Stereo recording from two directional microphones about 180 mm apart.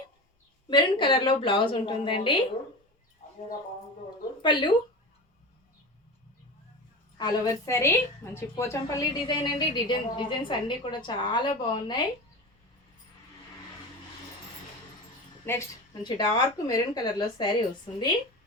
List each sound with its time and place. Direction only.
0.7 s a woman's voice: 25° left (ahead or behind)
4.4 s a woman's voice: 25° left (ahead or behind)
7.2 s a woman's voice: 20° left (ahead or behind)
15.5 s a woman's voice: 10° left (ahead or behind)